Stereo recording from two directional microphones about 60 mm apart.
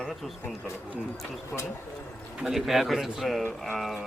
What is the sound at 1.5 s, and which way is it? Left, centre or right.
Speech, centre.